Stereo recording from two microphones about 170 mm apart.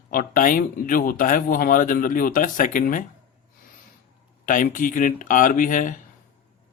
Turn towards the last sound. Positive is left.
turn(degrees=50)  # may be behind; listen again after turning